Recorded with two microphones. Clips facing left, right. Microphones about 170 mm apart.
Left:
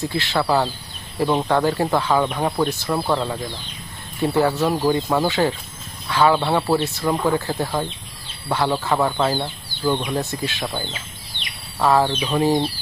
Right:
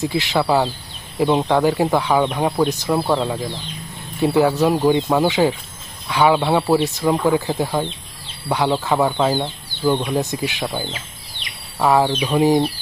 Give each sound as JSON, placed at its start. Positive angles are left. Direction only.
{"t": 0.0, "sound": "speech", "side_deg": -15}
{"t": 3.0, "sound": "speech", "side_deg": 0}
{"t": 4.2, "sound": "speech", "side_deg": -15}
{"t": 4.9, "sound": "speech", "side_deg": -5}
{"t": 8.4, "sound": "speech", "side_deg": -15}